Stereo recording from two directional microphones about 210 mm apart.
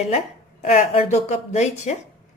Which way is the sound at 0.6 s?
30° left (ahead or behind).